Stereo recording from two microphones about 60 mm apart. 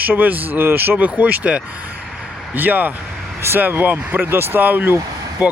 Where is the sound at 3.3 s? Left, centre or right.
Right.